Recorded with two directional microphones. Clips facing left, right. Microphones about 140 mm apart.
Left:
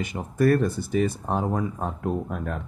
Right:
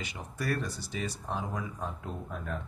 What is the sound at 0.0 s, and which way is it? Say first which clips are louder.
Speech: left 14 dB; 50° left (ahead or behind).